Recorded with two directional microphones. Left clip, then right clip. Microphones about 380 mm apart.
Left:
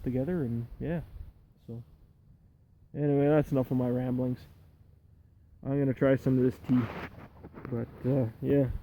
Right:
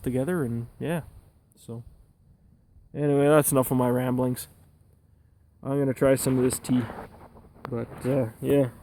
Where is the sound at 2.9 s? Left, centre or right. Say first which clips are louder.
Right 6 dB; centre.